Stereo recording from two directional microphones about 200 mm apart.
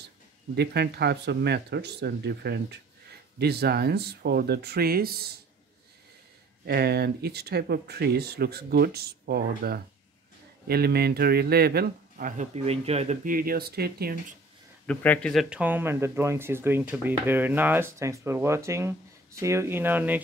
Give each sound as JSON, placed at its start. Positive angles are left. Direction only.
{"t": 0.6, "sound": "speech", "side_deg": -55}
{"t": 6.6, "sound": "speech", "side_deg": -55}
{"t": 14.9, "sound": "speech", "side_deg": 5}